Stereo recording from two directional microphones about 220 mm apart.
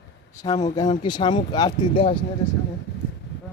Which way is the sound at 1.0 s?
20° left (ahead or behind).